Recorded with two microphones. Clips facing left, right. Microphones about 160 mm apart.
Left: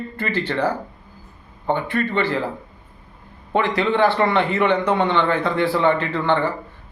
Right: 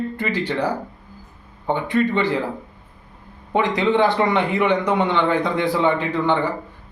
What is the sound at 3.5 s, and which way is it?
Speech, 20° right (ahead or behind).